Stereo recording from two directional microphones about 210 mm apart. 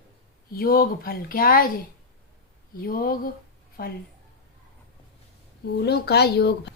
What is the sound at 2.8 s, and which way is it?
Speech, 45° left (ahead or behind).